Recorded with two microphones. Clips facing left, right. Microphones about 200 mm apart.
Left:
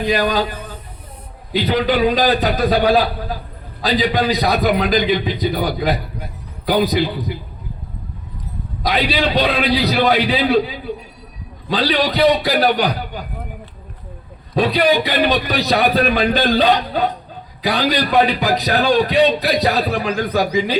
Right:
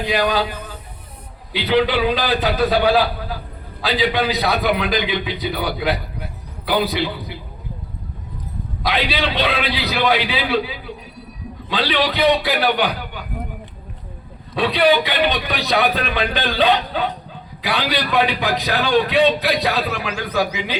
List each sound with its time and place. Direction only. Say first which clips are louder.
0.1 s a man's voice: even; 40° left (ahead or behind)
8.8 s a man's voice: left 3 dB; 40° left (ahead or behind)
14.5 s a man's voice: left 1 dB; 40° left (ahead or behind)